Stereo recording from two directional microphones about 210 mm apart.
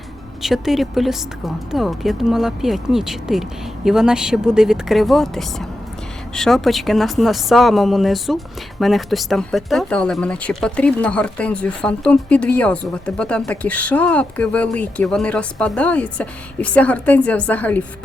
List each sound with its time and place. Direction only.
0.4 s speech: centre (ahead or behind)